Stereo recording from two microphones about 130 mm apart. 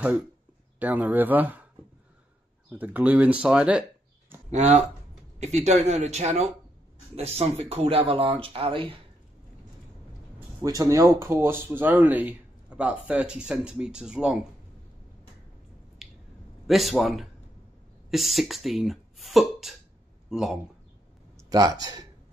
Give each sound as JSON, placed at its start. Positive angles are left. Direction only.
{"t": 0.7, "sound": "speech", "side_deg": -15}
{"t": 2.7, "sound": "speech", "side_deg": -10}
{"t": 4.5, "sound": "speech", "side_deg": -60}
{"t": 10.6, "sound": "speech", "side_deg": -25}
{"t": 16.6, "sound": "a man's voice", "side_deg": 0}
{"t": 21.5, "sound": "speech", "side_deg": -30}